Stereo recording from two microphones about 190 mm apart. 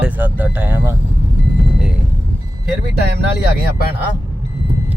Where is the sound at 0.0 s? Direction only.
10° right (ahead or behind).